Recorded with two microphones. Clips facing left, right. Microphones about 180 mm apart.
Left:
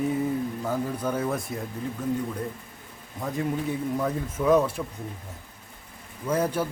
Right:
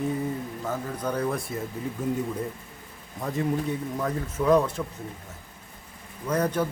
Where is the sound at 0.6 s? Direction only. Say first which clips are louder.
Left 2 dB; 10° left (ahead or behind).